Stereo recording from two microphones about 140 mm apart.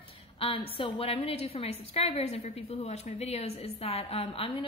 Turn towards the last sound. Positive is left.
turn(degrees=45)  # may be behind; listen again after turning